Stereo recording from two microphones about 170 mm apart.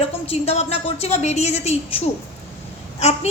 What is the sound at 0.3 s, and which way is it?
A woman's voice, 35° left (ahead or behind).